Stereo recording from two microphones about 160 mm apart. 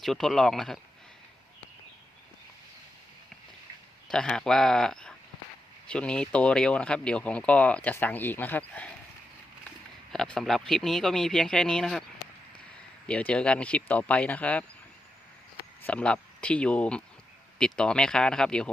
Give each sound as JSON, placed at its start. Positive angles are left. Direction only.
{"t": 0.0, "sound": "speech", "side_deg": 0}
{"t": 4.1, "sound": "speech", "side_deg": 5}
{"t": 10.1, "sound": "speech", "side_deg": 5}
{"t": 13.1, "sound": "speech", "side_deg": 5}
{"t": 15.9, "sound": "speech", "side_deg": 5}